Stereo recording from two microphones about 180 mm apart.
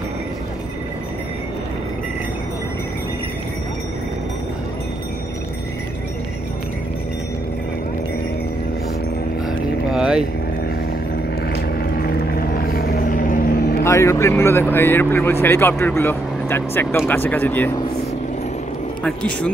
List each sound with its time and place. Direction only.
9.4 s vehicle: centre (ahead or behind)
12.4 s vehicle: 55° left (ahead or behind)
13.8 s speech: 15° left (ahead or behind)
19.0 s speech: 5° left (ahead or behind)